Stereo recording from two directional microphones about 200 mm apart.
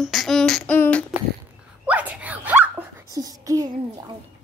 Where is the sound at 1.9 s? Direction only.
5° right (ahead or behind).